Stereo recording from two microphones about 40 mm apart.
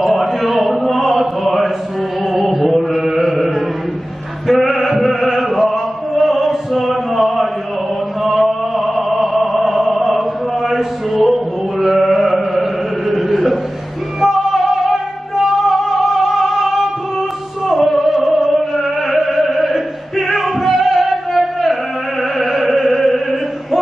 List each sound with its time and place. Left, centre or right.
0.1 s a sound: centre
2.4 s chant: centre
6.1 s music: centre
8.2 s chant: centre
12.4 s music: centre
13.1 s chant: centre
14.2 s music: centre
21.1 s a sound: centre
22.4 s music: centre